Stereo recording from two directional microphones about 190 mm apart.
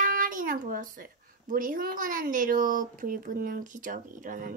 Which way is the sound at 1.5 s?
50° right (ahead or behind).